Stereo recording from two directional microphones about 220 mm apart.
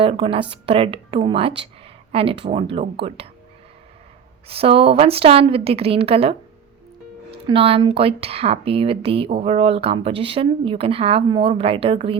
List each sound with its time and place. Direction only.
0.0 s speech: 25° right (ahead or behind)
4.4 s speech: 25° right (ahead or behind)